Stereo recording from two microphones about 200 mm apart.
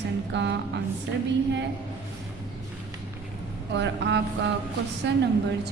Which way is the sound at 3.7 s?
60° right (ahead or behind).